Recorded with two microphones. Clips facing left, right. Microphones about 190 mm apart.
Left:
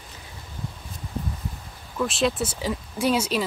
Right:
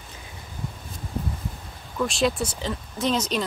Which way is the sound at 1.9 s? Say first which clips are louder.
Even; centre (ahead or behind).